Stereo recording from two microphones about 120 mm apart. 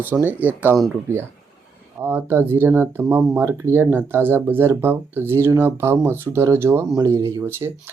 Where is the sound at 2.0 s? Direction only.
20° right (ahead or behind).